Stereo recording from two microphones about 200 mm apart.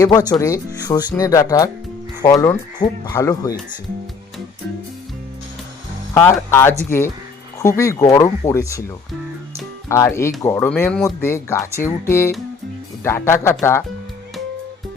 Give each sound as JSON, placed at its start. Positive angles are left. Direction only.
{"t": 0.0, "sound": "speech", "side_deg": 20}
{"t": 6.5, "sound": "speech", "side_deg": 10}
{"t": 9.9, "sound": "speech", "side_deg": 15}